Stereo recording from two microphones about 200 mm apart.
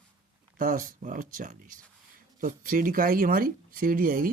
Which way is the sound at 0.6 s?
40° right (ahead or behind).